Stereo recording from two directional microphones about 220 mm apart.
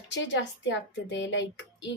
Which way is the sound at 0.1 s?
55° left (ahead or behind).